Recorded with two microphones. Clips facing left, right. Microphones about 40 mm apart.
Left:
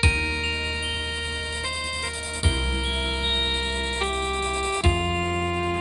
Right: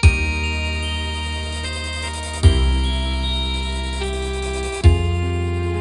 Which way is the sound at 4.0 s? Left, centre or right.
Left.